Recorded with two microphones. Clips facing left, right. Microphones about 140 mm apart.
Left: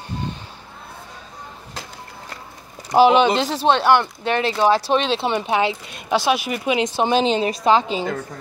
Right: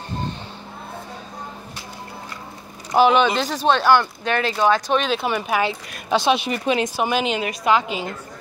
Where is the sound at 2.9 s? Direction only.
30° left (ahead or behind).